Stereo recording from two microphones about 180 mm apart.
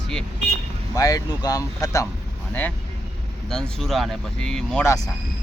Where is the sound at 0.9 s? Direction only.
20° left (ahead or behind).